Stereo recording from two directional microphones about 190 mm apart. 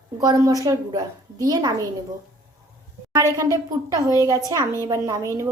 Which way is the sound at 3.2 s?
15° right (ahead or behind).